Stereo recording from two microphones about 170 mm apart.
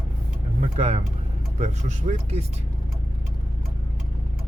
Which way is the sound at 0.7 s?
40° right (ahead or behind).